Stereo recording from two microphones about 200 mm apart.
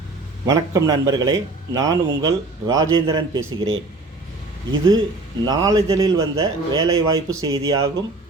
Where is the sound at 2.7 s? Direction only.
90° right.